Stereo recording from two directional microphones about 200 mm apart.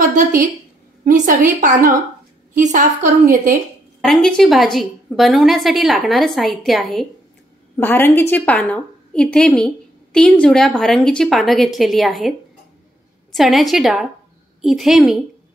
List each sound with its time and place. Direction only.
0.1 s a woman's voice: 45° right (ahead or behind)
4.0 s a woman's voice: 5° left (ahead or behind)
7.7 s a woman's voice: 10° left (ahead or behind)